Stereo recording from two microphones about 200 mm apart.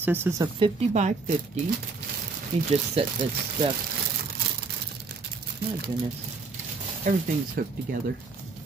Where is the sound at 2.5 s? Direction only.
30° right (ahead or behind).